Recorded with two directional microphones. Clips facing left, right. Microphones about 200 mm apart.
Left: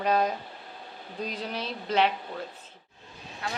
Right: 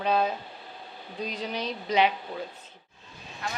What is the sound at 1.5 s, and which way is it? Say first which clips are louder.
Speech: right 1 dB; 5° left (ahead or behind).